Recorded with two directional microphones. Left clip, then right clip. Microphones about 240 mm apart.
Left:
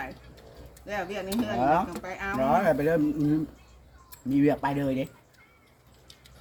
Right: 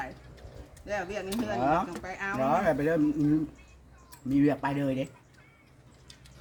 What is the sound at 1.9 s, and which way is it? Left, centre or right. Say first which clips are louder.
Speech: left 1 dB; centre.